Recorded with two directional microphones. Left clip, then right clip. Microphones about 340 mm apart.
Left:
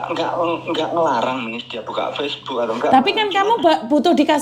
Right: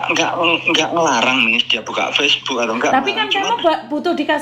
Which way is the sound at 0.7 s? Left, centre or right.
Right.